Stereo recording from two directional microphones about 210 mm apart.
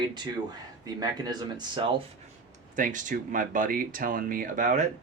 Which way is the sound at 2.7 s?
40° right (ahead or behind).